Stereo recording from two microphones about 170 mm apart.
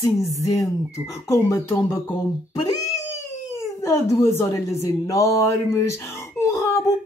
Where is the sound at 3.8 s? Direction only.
15° left (ahead or behind).